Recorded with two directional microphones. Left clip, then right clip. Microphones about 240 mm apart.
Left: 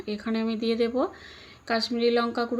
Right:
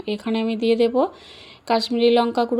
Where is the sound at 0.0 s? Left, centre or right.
Right.